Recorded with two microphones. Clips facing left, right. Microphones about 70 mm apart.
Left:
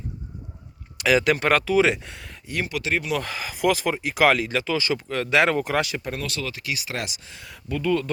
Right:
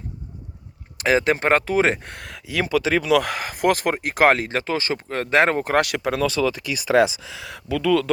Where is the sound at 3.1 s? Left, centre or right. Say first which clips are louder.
Right 8 dB; right.